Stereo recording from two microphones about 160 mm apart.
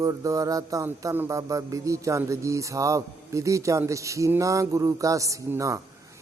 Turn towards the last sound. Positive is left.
turn(degrees=-20)  # may be behind; listen again after turning